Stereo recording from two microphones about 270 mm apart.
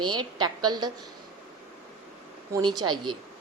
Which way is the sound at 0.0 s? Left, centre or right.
Centre.